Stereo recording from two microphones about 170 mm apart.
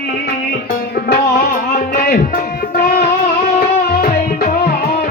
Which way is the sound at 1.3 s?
60° left (ahead or behind).